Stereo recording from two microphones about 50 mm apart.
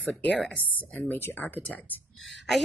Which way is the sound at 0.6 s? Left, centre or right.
Left.